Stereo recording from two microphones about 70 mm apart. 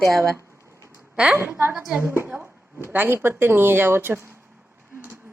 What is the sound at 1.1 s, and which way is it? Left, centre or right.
Speech, centre.